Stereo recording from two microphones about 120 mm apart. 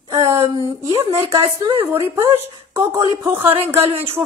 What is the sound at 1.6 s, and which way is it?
Speech, 45° right (ahead or behind).